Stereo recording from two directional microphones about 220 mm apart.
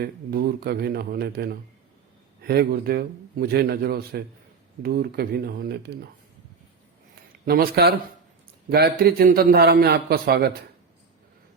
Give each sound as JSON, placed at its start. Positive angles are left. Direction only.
{"t": 0.0, "sound": "a man's voice", "side_deg": -45}
{"t": 7.4, "sound": "a man's voice", "side_deg": -45}